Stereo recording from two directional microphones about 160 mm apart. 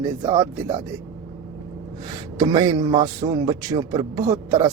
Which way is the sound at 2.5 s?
25° right (ahead or behind).